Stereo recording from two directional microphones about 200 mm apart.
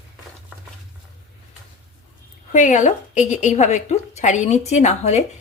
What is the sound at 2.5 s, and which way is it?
A woman's voice, 35° left (ahead or behind).